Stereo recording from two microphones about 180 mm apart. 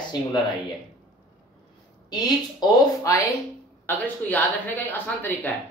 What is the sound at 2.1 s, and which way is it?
A woman's voice, 20° left (ahead or behind).